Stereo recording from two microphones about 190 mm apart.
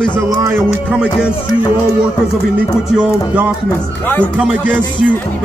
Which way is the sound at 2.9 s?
5° right (ahead or behind).